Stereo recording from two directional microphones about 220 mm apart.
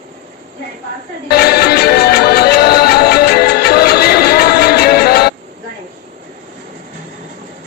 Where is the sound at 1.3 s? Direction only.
45° left (ahead or behind).